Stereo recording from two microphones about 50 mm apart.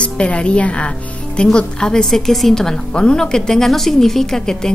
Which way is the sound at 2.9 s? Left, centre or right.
Centre.